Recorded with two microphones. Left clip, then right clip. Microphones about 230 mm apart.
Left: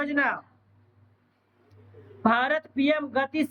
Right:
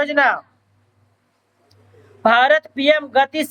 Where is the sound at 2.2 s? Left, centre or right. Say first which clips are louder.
Right 10 dB; centre.